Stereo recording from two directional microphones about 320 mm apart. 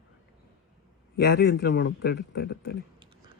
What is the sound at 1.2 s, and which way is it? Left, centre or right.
Speech, left.